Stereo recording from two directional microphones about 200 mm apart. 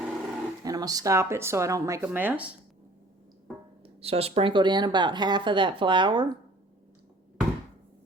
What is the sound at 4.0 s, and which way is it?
A woman's voice, 30° right (ahead or behind).